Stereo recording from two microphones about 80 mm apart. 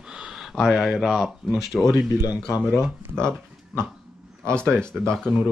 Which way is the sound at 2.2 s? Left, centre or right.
Left.